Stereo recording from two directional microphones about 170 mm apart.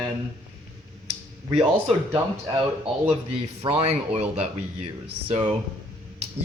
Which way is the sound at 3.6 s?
35° right (ahead or behind).